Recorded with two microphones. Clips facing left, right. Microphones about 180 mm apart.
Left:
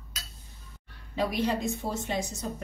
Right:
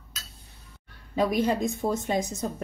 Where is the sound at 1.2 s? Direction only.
45° right (ahead or behind).